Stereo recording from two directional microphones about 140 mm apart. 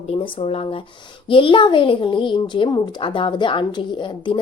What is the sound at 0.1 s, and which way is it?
A woman's voice, 45° left (ahead or behind).